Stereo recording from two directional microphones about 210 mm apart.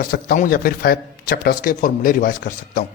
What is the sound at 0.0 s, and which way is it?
A man's voice, 40° left (ahead or behind).